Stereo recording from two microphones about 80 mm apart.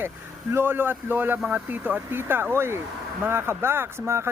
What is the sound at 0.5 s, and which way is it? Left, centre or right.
Speech, right.